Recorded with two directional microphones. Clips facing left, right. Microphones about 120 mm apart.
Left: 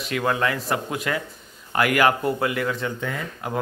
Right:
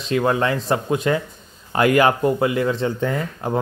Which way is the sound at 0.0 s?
25° right (ahead or behind).